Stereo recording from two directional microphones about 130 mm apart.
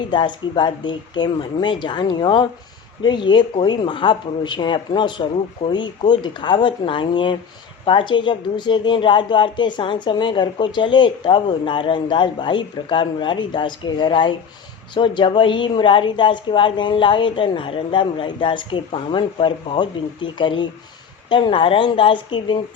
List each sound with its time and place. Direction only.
0.1 s a woman's voice: 35° left (ahead or behind)